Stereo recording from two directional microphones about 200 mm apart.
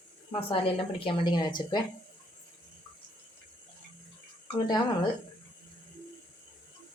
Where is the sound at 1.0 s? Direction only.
25° left (ahead or behind).